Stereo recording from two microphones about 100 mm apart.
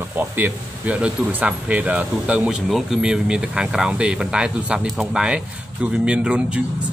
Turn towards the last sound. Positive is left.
turn(degrees=-10)  # may be behind; listen again after turning